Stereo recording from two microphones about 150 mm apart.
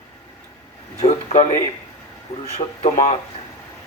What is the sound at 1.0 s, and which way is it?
Speech, 50° left (ahead or behind).